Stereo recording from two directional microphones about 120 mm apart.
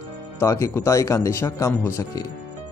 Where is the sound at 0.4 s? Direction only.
25° left (ahead or behind).